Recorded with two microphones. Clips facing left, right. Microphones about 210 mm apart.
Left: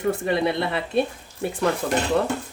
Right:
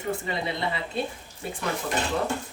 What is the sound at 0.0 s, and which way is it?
Speech, 65° left (ahead or behind).